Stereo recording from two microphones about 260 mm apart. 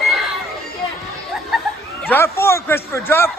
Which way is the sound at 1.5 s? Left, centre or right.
Centre.